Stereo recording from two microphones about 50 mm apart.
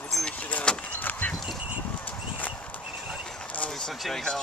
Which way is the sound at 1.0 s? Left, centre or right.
Left.